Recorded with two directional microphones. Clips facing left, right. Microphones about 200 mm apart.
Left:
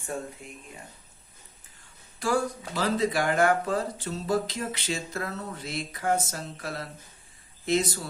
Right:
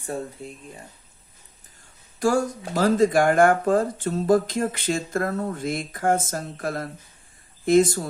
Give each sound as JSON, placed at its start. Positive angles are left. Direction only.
{"t": 0.0, "sound": "speech", "side_deg": -35}
{"t": 2.1, "sound": "speech", "side_deg": -45}